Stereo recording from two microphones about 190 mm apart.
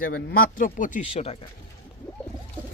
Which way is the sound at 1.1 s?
30° left (ahead or behind).